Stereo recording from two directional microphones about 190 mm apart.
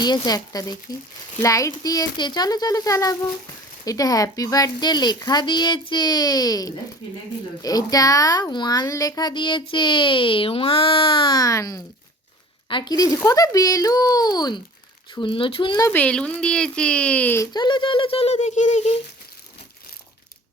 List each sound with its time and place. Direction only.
0.0 s a woman's voice: 20° left (ahead or behind)
15.9 s a woman's voice: 5° left (ahead or behind); by 18.9 s 35° left (ahead or behind)